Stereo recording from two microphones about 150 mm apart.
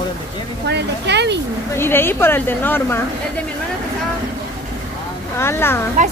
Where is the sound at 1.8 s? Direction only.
15° left (ahead or behind).